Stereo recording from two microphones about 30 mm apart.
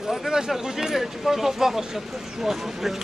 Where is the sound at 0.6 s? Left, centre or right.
Centre.